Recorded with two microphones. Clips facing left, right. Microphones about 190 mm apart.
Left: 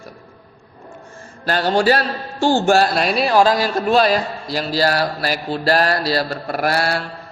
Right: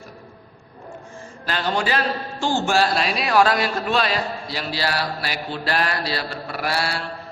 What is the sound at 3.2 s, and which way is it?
Speech, 30° left (ahead or behind).